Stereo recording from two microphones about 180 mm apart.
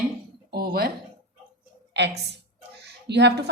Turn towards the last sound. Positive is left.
turn(degrees=-70)  # may be behind; listen again after turning